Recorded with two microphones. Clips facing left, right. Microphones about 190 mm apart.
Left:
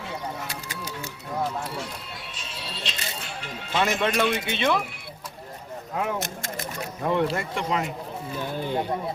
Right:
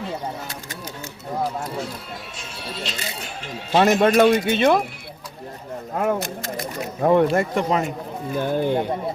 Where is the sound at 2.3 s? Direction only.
45° right (ahead or behind).